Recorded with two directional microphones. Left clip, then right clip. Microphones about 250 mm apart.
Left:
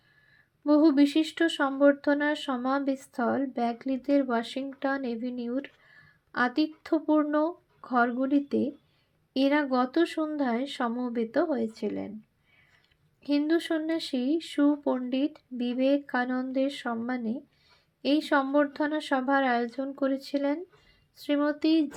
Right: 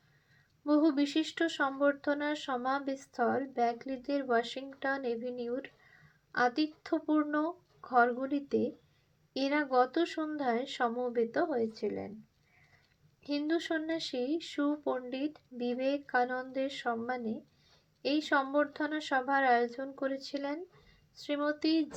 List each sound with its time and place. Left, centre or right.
0.6 s speech: left
13.2 s speech: left